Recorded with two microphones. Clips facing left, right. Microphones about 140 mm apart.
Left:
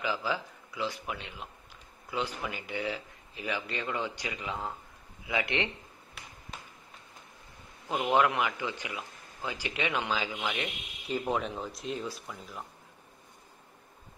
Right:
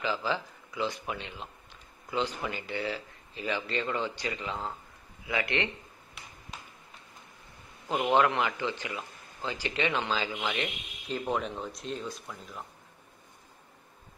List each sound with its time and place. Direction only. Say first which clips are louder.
0.0 s speech: right 1 dB; 10° left (ahead or behind)
8.1 s speech: right 1 dB; 10° left (ahead or behind)